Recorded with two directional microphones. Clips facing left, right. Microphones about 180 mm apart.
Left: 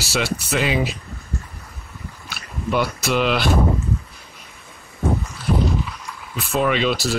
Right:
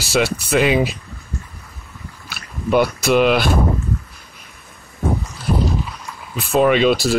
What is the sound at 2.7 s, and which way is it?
Speech, 15° right (ahead or behind).